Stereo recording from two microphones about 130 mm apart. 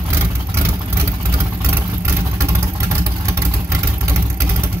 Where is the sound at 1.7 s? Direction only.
20° right (ahead or behind).